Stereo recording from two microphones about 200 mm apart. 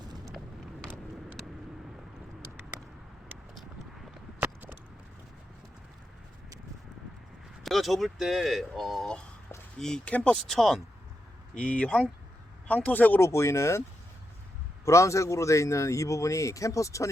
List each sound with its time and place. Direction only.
7.6 s a man's voice: centre (ahead or behind)
14.8 s a man's voice: 15° left (ahead or behind)